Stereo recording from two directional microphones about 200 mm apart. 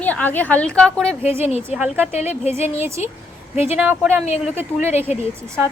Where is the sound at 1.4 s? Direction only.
35° left (ahead or behind).